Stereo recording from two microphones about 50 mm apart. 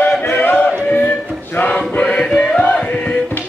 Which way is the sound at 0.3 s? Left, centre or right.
Left.